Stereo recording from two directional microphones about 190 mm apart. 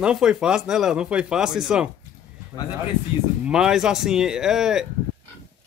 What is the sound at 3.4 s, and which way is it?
Speech, 5° right (ahead or behind).